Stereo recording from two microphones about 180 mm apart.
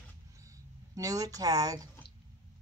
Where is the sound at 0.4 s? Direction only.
20° right (ahead or behind).